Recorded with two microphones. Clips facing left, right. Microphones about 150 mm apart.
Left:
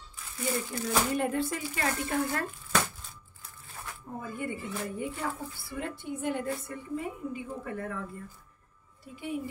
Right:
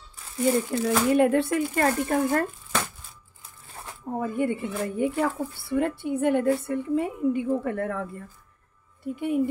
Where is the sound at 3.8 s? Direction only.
30° right (ahead or behind).